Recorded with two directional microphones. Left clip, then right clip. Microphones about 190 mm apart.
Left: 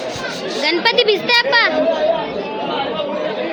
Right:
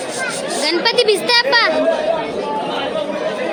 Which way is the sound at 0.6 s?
10° right (ahead or behind).